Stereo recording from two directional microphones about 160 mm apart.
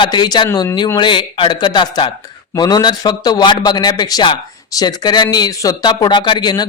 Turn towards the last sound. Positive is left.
turn(degrees=25)  # may be behind; listen again after turning